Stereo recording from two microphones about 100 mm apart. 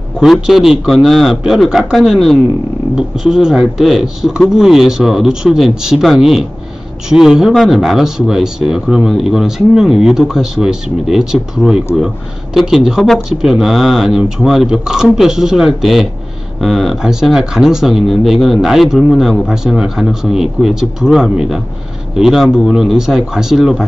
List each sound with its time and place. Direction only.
0.2 s speech: 5° right (ahead or behind)